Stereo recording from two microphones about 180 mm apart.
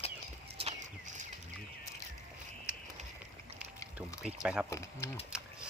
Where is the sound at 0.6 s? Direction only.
40° right (ahead or behind).